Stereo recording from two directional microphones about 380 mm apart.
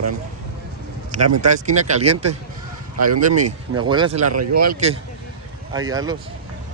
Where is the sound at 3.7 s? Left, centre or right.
Centre.